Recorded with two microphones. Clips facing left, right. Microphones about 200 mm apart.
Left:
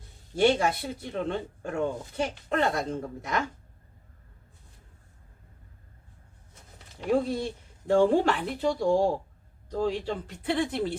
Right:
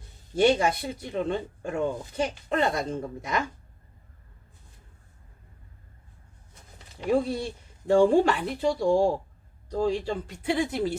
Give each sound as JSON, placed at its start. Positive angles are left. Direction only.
{"t": 0.3, "sound": "speech", "side_deg": -15}
{"t": 7.0, "sound": "speech", "side_deg": -5}